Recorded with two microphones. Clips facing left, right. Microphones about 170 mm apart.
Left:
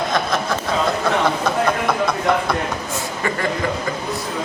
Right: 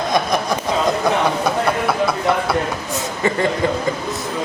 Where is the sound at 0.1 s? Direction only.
15° right (ahead or behind).